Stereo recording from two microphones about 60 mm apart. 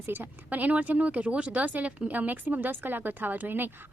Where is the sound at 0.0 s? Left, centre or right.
Right.